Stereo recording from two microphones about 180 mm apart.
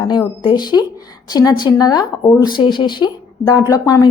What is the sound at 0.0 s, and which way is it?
Speech, 25° left (ahead or behind).